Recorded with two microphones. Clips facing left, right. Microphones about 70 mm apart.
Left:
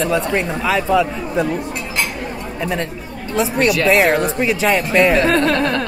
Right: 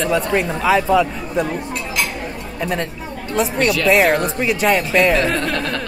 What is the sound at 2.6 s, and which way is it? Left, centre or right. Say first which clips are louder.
Speech: right 1 dB; centre.